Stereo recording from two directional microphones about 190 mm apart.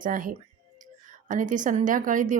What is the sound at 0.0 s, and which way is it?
A woman's voice, 45° right (ahead or behind).